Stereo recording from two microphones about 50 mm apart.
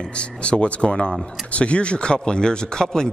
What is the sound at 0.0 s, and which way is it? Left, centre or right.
A man's voice, left.